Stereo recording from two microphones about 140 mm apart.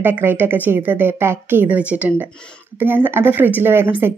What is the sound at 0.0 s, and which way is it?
A woman's voice, 15° right (ahead or behind).